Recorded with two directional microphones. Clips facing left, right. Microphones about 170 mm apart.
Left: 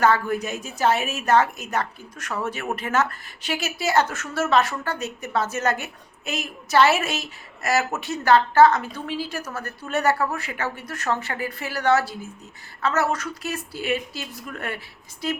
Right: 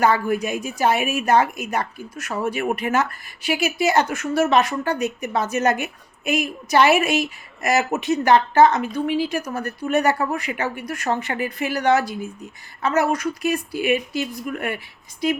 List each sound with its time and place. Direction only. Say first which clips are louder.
0.0 s a woman's voice: right 2 dB; 10° right (ahead or behind)